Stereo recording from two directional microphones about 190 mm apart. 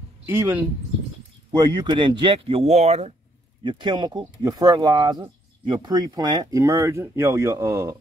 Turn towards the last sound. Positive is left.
turn(degrees=-15)  # may be behind; listen again after turning